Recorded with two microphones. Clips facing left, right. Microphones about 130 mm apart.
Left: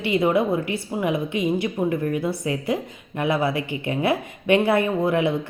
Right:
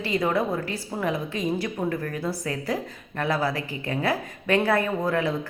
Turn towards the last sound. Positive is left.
turn(degrees=25)  # may be behind; listen again after turning